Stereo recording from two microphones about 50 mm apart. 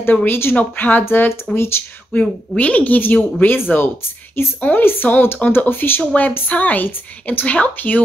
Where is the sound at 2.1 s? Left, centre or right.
Left.